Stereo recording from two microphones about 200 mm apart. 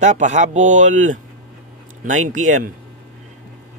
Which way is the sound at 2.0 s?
40° right (ahead or behind).